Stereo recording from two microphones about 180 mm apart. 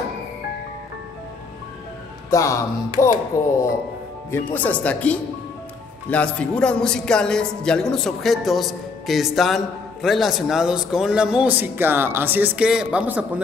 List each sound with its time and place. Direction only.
2.3 s speech: 15° left (ahead or behind); by 13.4 s 10° right (ahead or behind)